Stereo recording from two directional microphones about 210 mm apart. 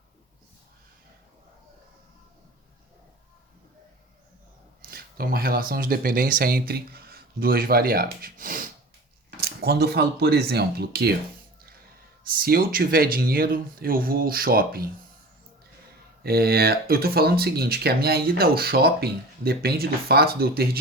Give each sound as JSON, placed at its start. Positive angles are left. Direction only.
{"t": 4.8, "sound": "speech", "side_deg": -45}
{"t": 12.2, "sound": "speech", "side_deg": -45}
{"t": 16.2, "sound": "speech", "side_deg": -45}